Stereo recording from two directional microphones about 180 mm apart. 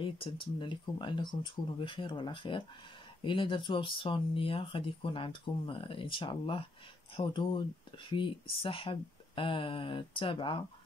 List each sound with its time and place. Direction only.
0.0 s speech: 30° left (ahead or behind)